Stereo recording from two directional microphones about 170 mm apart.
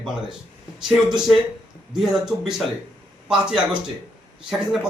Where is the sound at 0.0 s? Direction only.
5° right (ahead or behind).